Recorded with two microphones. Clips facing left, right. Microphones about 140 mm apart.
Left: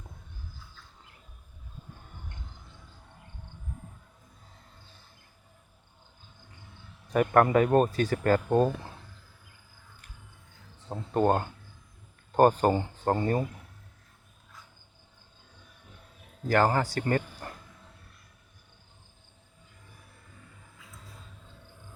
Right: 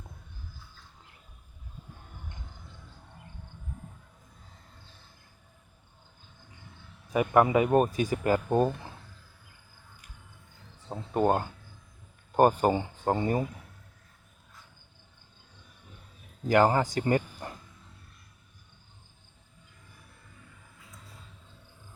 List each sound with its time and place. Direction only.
7.1 s speech: 10° right (ahead or behind)
10.9 s speech: 10° right (ahead or behind)
16.5 s speech: 15° right (ahead or behind)